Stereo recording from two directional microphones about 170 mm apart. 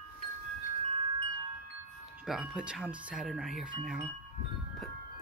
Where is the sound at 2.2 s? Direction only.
Centre (ahead or behind).